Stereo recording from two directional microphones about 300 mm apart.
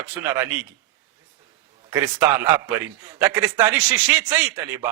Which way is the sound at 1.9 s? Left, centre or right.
Centre.